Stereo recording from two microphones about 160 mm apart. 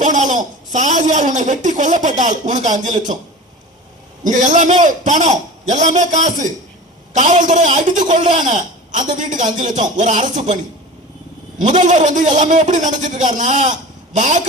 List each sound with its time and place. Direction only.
0.0 s speech: 50° right (ahead or behind)
4.2 s speech: 50° right (ahead or behind)
11.6 s speech: 50° right (ahead or behind)